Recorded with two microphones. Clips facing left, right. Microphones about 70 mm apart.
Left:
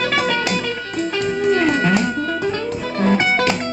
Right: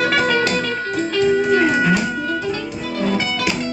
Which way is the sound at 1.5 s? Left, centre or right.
Centre.